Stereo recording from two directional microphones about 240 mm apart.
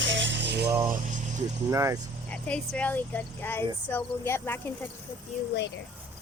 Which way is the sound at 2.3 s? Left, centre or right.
Centre.